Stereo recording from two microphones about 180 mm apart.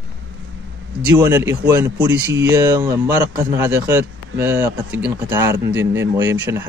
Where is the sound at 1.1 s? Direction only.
20° right (ahead or behind).